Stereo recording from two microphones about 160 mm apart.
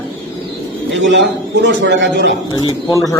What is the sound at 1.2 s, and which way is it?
Speech, 90° right.